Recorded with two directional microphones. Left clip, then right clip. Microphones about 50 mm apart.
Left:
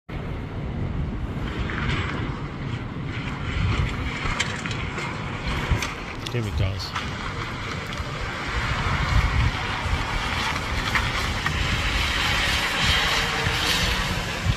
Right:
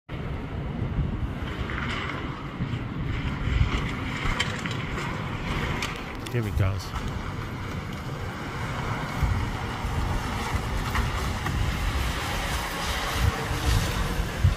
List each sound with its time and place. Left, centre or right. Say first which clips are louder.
3.7 s boat: left 1 dB; right
5.5 s skateboard: left 2 dB; right
8.7 s vehicle: left 5 dB; right
10.2 s vehicle: left 6 dB; right
12.4 s a sound: left 8 dB; right
13.6 s a sound: left 7 dB; right